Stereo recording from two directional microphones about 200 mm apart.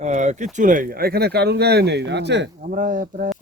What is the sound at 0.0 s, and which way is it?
Speech, 35° right (ahead or behind).